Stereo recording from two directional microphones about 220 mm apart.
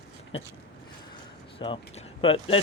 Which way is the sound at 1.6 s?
25° left (ahead or behind).